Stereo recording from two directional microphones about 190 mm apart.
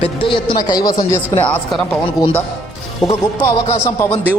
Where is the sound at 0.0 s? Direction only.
25° left (ahead or behind).